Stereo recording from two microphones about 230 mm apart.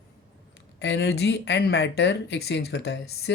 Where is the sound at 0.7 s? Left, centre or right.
Left.